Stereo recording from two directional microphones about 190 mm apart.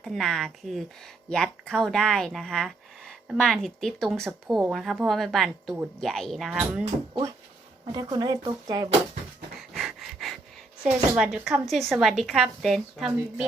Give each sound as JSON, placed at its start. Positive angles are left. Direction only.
{"t": 0.0, "sound": "a woman's voice", "side_deg": 0}
{"t": 7.9, "sound": "speech", "side_deg": -20}
{"t": 9.6, "sound": "pant", "side_deg": 0}
{"t": 11.2, "sound": "a woman's voice", "side_deg": 0}